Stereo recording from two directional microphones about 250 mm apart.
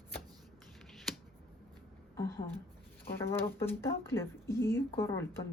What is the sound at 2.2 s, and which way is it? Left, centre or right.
A woman's voice, centre.